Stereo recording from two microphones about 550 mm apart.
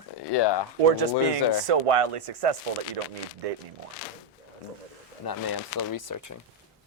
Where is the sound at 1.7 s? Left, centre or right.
Right.